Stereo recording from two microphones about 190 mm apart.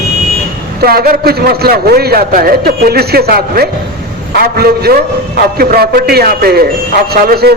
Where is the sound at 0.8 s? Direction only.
50° right (ahead or behind).